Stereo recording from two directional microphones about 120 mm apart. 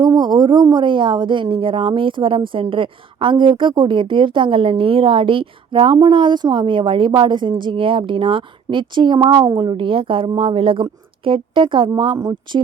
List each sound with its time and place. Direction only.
0.2 s speech: 35° right (ahead or behind)